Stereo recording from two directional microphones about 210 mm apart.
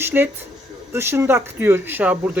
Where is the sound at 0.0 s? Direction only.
10° right (ahead or behind).